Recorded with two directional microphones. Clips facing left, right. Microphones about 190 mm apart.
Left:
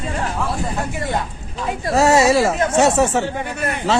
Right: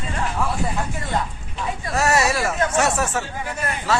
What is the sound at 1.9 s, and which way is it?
Speech, 25° left (ahead or behind).